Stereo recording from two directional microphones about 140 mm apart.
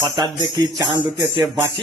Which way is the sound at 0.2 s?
35° right (ahead or behind).